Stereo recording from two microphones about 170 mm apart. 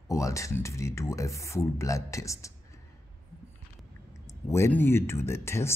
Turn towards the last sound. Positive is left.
turn(degrees=15)  # may be behind; listen again after turning